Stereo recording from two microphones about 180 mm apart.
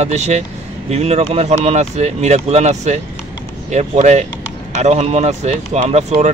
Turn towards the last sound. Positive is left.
turn(degrees=-35)  # may be behind; listen again after turning